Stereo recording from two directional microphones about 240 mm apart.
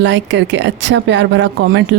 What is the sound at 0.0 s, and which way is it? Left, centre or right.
A woman's voice, right.